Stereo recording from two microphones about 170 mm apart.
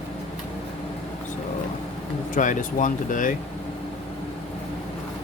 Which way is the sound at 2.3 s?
50° left (ahead or behind).